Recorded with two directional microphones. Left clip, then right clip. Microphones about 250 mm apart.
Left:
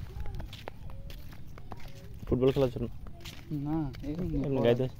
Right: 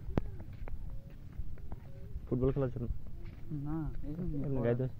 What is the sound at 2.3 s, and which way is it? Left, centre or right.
Speech, left.